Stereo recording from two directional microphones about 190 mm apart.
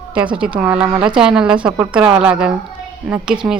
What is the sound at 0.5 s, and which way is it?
Speech, 5° right (ahead or behind).